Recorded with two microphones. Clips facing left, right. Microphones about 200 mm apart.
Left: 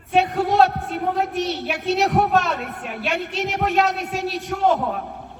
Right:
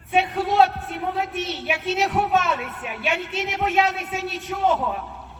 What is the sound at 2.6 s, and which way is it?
Speech, 45° left (ahead or behind).